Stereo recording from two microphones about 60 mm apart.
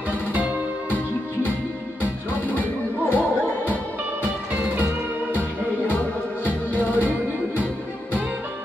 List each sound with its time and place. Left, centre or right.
0.3 s music: right
2.5 s music: left
6.4 s music: left